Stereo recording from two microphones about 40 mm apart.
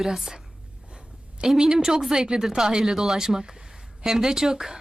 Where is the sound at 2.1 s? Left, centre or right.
Centre.